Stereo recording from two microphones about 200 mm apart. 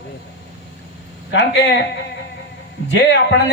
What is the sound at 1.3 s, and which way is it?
Speech, 60° left (ahead or behind).